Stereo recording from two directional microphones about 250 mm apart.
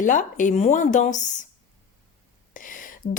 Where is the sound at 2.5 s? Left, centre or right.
Left.